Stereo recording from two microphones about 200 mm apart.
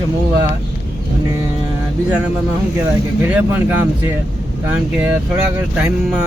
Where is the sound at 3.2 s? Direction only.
10° right (ahead or behind).